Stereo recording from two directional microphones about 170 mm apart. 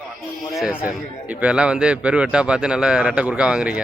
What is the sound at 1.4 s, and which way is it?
A man's voice, 5° right (ahead or behind).